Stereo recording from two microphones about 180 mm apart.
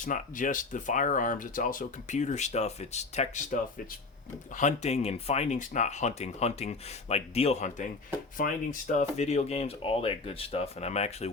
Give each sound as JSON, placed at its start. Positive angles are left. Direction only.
{"t": 0.0, "sound": "speech", "side_deg": 45}